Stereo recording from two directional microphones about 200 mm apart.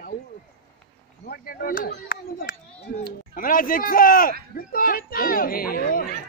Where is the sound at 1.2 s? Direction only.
50° left (ahead or behind).